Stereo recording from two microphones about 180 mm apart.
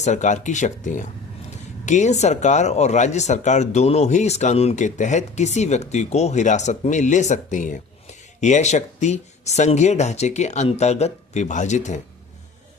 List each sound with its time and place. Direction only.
0.0 s speech: 40° left (ahead or behind)